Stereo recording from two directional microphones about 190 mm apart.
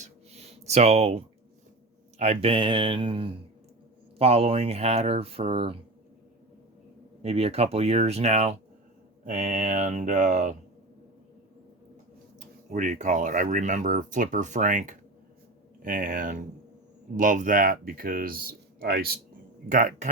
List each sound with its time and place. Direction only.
0.0 s a sound: 35° right (ahead or behind)
2.1 s speech: 35° right (ahead or behind)
7.2 s speech: 35° right (ahead or behind)
12.4 s speech: 40° right (ahead or behind)